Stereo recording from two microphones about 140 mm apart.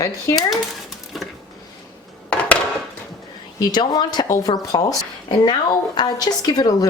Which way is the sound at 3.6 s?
30° left (ahead or behind).